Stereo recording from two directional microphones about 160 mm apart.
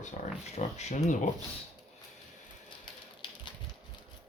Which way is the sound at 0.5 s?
45° left (ahead or behind).